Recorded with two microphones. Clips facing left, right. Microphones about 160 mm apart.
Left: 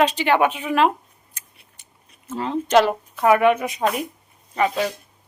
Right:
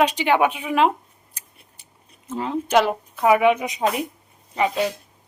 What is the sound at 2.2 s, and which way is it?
A woman's voice, 15° right (ahead or behind).